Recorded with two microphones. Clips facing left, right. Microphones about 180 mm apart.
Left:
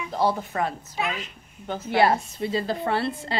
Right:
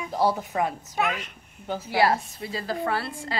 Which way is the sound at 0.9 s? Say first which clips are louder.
Right 2 dB; 50° right (ahead or behind).